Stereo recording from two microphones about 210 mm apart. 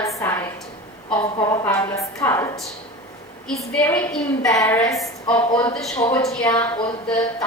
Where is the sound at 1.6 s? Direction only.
10° left (ahead or behind).